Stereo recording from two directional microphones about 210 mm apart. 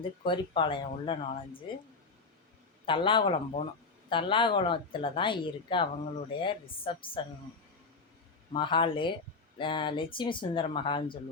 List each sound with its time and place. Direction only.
0.3 s speech: 25° left (ahead or behind)
2.8 s speech: 25° left (ahead or behind)
8.5 s speech: 25° left (ahead or behind)